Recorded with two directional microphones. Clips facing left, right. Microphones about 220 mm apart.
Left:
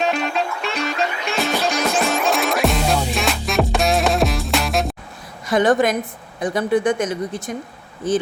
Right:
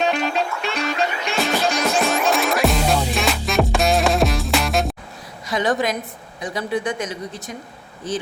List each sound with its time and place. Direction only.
0.0 s music: centre (ahead or behind)
5.5 s speech: 50° left (ahead or behind)